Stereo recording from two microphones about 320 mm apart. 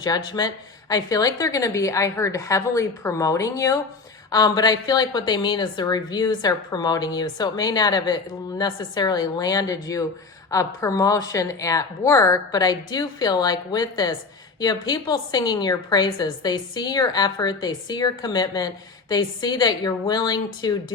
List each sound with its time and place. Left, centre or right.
0.3 s a woman's voice: centre